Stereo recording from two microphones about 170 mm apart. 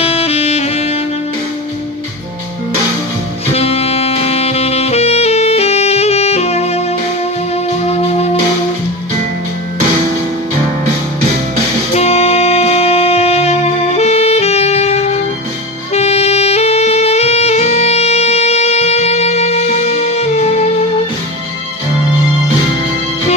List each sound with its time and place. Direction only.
0.0 s saxophone: 35° left (ahead or behind)
3.5 s saxophone: 35° left (ahead or behind)
7.5 s music: 40° left (ahead or behind)
11.9 s music: 40° left (ahead or behind)
15.9 s saxophone: 40° left (ahead or behind)